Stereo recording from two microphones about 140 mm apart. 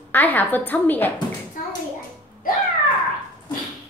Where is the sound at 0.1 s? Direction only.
15° left (ahead or behind).